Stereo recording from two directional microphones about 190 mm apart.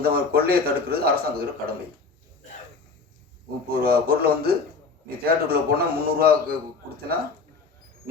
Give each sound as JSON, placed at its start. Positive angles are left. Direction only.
{"t": 0.0, "sound": "a man's voice", "side_deg": -55}
{"t": 3.8, "sound": "a man's voice", "side_deg": -55}